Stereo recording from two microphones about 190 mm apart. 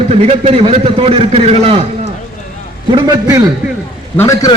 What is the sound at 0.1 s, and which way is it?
A man's voice, 35° right (ahead or behind).